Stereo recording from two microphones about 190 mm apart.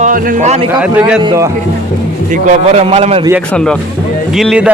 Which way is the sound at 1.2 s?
15° right (ahead or behind).